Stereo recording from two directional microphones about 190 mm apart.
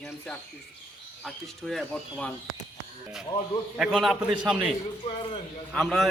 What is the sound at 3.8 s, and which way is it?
Speech, centre (ahead or behind).